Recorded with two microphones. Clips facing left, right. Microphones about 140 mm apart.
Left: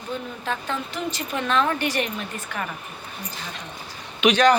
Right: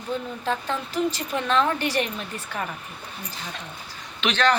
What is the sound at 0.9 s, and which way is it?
Speech, 30° right (ahead or behind).